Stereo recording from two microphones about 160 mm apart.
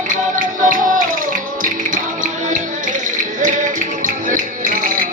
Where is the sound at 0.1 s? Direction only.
55° right (ahead or behind).